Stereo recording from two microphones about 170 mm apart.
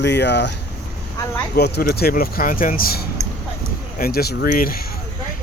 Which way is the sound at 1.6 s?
70° left (ahead or behind).